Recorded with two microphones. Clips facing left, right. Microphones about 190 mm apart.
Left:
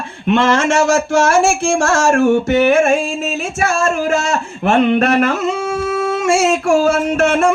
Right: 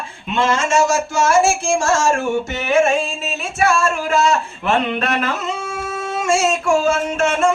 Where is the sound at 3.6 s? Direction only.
45° left (ahead or behind).